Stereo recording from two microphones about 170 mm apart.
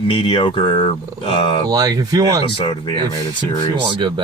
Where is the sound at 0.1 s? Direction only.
30° left (ahead or behind).